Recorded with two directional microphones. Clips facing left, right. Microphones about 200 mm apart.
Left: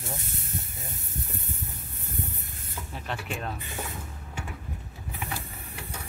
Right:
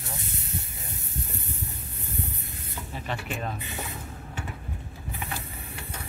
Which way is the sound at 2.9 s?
Centre (ahead or behind).